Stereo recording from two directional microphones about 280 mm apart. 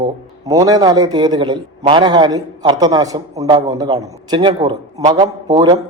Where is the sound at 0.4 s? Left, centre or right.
Centre.